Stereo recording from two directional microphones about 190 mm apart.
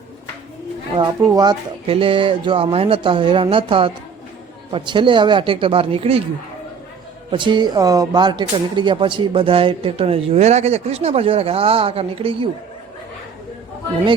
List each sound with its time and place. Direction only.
0.9 s speech: 20° right (ahead or behind)
7.3 s speech: 25° right (ahead or behind)